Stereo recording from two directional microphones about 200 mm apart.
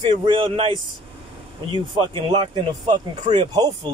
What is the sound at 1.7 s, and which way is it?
A man's voice, 25° right (ahead or behind).